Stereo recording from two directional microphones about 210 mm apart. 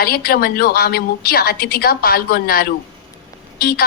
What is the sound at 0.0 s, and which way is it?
A woman's voice, 45° left (ahead or behind).